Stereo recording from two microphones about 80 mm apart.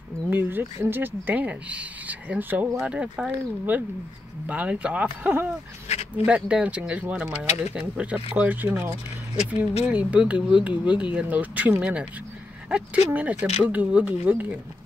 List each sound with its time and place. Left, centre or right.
0.3 s speech: right